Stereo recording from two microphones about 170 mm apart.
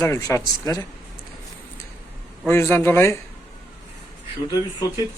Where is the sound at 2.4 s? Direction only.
15° left (ahead or behind).